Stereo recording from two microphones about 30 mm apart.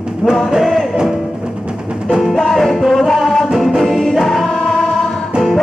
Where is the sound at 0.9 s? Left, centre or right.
Centre.